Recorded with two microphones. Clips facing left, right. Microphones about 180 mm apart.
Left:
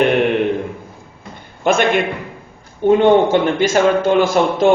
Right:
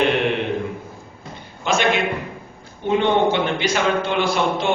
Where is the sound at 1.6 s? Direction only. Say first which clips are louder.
Left 5 dB; 55° left (ahead or behind).